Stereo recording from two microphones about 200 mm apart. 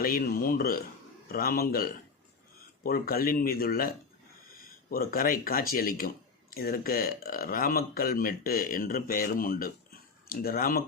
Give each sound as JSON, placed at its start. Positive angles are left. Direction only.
{"t": 0.0, "sound": "a man's voice", "side_deg": 45}